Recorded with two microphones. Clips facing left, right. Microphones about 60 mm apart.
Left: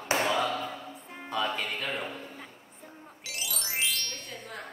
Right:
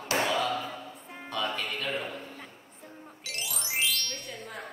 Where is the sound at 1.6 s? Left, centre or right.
Centre.